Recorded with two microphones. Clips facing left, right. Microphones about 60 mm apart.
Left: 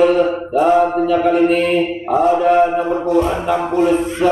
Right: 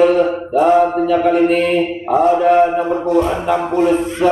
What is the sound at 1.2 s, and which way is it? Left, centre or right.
Mantra, right.